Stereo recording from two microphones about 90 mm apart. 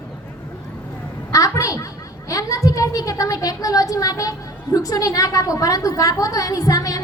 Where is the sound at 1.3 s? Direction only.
35° left (ahead or behind).